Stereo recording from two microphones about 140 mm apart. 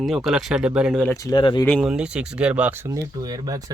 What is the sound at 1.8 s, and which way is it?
Speech, 5° right (ahead or behind).